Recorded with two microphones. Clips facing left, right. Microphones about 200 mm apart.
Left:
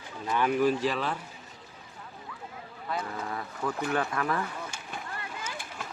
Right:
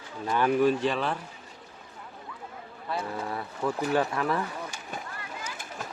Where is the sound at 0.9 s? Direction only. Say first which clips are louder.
Right 2 dB; centre (ahead or behind).